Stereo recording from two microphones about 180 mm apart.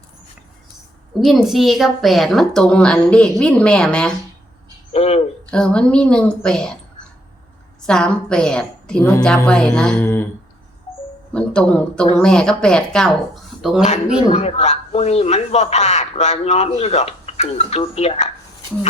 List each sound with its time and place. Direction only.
1.2 s a woman's voice: centre (ahead or behind)
4.9 s a sound: 35° left (ahead or behind)
5.5 s a woman's voice: 5° left (ahead or behind)
7.8 s a woman's voice: 5° left (ahead or behind)
11.3 s a woman's voice: 5° left (ahead or behind)
14.2 s a man's voice: 35° left (ahead or behind)